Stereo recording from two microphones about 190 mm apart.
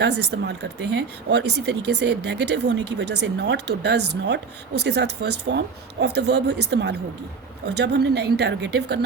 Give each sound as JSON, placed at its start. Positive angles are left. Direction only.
{"t": 0.0, "sound": "speech", "side_deg": -65}